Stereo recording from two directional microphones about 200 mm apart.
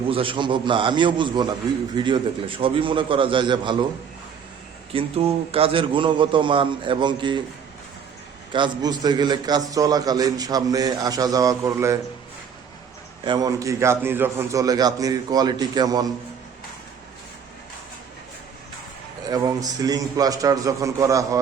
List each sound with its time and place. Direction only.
0.1 s a man's voice: 25° right (ahead or behind)
4.9 s a man's voice: 30° right (ahead or behind)
8.5 s a man's voice: 20° right (ahead or behind)
13.2 s a man's voice: 20° right (ahead or behind)
19.2 s a man's voice: 20° right (ahead or behind)